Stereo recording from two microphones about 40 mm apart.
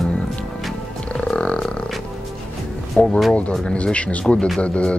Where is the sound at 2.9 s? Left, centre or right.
Centre.